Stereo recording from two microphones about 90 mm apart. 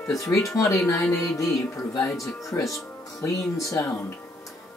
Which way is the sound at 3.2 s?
40° left (ahead or behind).